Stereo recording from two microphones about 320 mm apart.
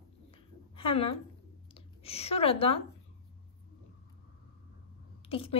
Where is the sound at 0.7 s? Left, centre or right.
Centre.